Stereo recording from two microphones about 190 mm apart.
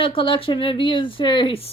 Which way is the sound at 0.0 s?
25° left (ahead or behind).